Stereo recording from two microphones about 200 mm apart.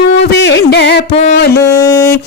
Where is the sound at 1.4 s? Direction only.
55° left (ahead or behind).